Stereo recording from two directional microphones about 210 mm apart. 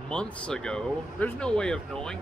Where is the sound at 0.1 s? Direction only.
5° left (ahead or behind).